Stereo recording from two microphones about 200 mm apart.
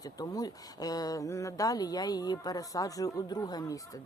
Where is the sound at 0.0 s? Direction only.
20° left (ahead or behind).